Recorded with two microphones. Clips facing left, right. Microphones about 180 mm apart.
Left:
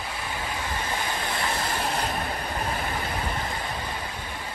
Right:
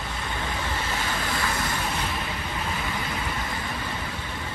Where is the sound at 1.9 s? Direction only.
45° left (ahead or behind).